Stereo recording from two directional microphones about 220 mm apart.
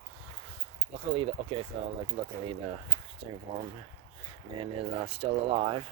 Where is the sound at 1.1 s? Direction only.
25° right (ahead or behind).